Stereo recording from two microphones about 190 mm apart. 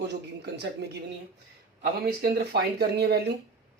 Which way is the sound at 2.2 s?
55° right (ahead or behind).